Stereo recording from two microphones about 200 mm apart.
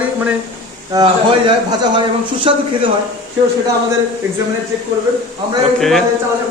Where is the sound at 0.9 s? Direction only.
15° right (ahead or behind).